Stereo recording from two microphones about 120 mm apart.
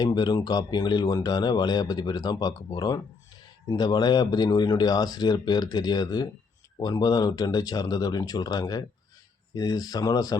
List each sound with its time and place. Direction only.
0.0 s speech: 35° left (ahead or behind)